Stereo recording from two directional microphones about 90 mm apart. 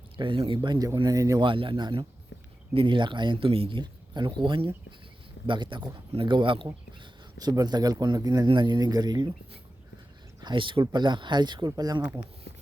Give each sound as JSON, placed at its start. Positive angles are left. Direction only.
{"t": 0.2, "sound": "speech", "side_deg": -70}
{"t": 0.9, "sound": "a man's voice", "side_deg": -40}
{"t": 1.4, "sound": "speech", "side_deg": -70}
{"t": 7.3, "sound": "speech", "side_deg": -45}
{"t": 8.4, "sound": "speech", "side_deg": -60}
{"t": 10.4, "sound": "speech", "side_deg": -65}